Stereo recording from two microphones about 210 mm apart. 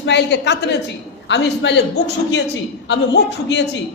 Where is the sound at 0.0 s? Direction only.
55° left (ahead or behind).